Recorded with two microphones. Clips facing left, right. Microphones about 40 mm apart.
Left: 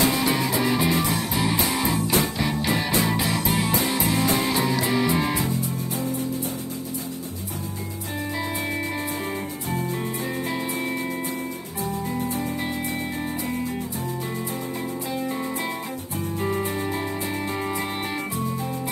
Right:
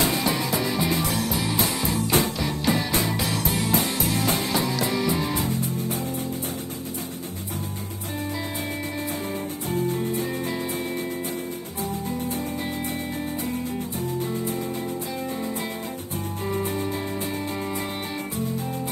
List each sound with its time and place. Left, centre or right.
0.0 s music: left
9.7 s music: left
11.8 s music: left